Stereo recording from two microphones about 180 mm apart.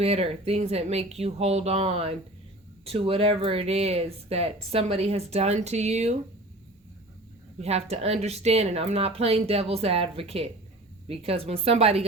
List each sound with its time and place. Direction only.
0.0 s speech: 35° right (ahead or behind)
7.6 s speech: 35° right (ahead or behind)